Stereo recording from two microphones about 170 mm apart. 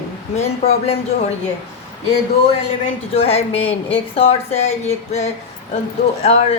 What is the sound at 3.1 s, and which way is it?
A woman's voice, 35° left (ahead or behind).